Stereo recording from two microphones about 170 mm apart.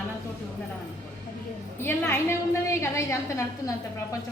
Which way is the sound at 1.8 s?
15° left (ahead or behind).